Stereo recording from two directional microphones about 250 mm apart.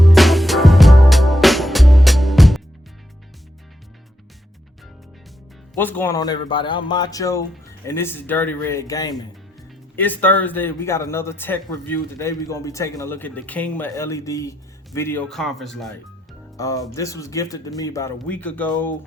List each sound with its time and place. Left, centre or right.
0.0 s music: centre
5.7 s speech: centre
16.6 s speech: centre